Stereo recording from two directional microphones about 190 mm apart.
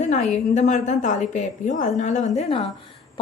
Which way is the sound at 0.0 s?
40° left (ahead or behind).